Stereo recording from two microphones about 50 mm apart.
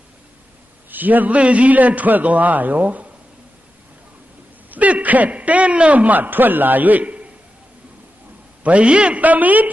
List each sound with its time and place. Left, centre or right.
0.9 s a man's voice: right
4.7 s a man's voice: right
8.6 s a man's voice: right